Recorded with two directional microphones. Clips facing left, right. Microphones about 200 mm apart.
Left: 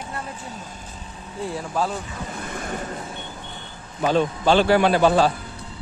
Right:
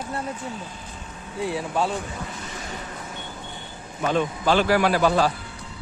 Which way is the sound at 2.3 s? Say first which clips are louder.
Left 5 dB; 55° left (ahead or behind).